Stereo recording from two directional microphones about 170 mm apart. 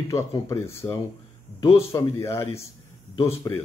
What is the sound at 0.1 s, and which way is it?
A man's voice, 20° left (ahead or behind).